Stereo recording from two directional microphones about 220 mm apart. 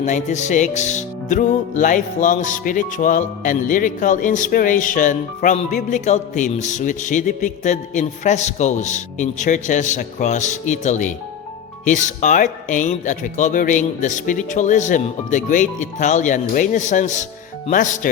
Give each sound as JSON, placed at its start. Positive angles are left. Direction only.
{"t": 0.0, "sound": "music", "side_deg": 35}